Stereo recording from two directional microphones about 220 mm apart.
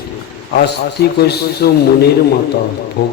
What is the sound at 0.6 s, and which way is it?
A man's voice, 50° left (ahead or behind).